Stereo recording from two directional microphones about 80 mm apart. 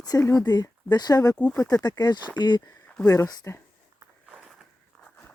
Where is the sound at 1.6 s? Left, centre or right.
Left.